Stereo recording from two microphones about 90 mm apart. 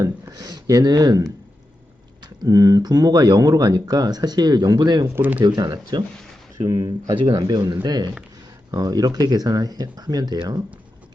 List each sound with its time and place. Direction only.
0.0 s speech: 45° right (ahead or behind)
5.1 s speech: 20° right (ahead or behind)
5.4 s speech: 50° right (ahead or behind)